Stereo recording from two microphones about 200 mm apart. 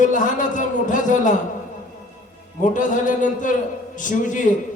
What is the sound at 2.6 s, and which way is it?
A man's voice, 40° left (ahead or behind).